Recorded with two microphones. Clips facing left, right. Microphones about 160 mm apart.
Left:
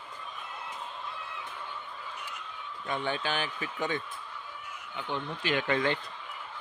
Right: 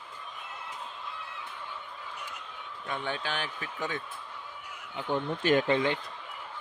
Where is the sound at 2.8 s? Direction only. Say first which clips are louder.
Left 2 dB; centre (ahead or behind).